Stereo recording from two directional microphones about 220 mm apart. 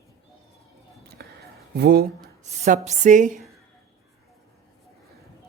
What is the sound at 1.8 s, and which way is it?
Speech, 45° right (ahead or behind).